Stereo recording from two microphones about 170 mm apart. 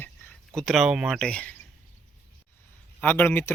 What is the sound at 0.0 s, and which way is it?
Speech, 5° left (ahead or behind).